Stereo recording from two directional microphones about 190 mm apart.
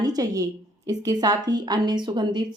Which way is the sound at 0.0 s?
20° right (ahead or behind).